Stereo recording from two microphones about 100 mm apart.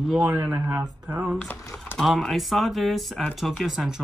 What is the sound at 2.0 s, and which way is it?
Speech, centre (ahead or behind).